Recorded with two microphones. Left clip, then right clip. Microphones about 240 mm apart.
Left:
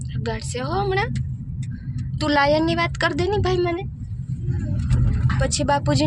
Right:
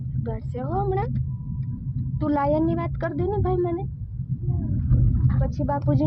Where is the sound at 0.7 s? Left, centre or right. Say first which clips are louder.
Left 3 dB; centre.